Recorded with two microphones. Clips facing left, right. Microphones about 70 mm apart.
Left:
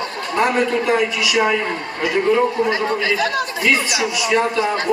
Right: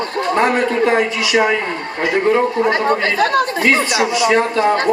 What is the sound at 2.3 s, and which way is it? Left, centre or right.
Speech, right.